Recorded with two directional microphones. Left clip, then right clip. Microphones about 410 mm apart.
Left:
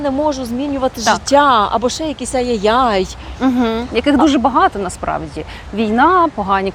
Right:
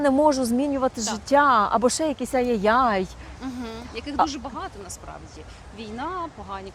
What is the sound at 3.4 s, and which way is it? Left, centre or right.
A woman's voice, left.